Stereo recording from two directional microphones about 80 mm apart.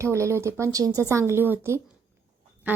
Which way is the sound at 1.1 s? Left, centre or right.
Right.